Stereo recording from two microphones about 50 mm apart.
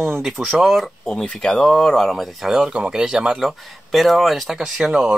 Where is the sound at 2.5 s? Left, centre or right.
Centre.